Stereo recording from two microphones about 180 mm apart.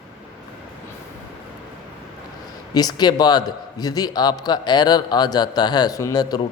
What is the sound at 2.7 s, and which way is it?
Speech, 20° left (ahead or behind).